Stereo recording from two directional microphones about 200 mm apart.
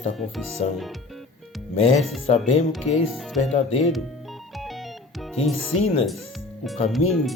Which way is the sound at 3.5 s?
30° left (ahead or behind).